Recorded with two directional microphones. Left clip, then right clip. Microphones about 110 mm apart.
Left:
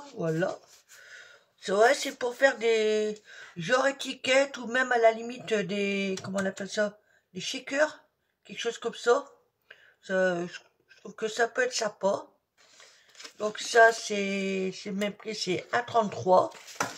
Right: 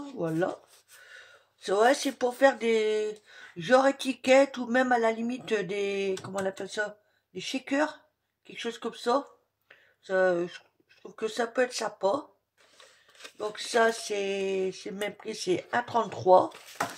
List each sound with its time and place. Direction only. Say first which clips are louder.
0.2 s speech: even; 45° right (ahead or behind)
13.4 s speech: left 5 dB; 35° right (ahead or behind)